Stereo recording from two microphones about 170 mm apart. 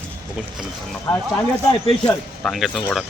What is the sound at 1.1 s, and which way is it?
Speech, 20° left (ahead or behind).